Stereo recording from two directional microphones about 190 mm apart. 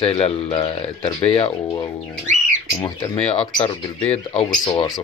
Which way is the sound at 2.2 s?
40° right (ahead or behind).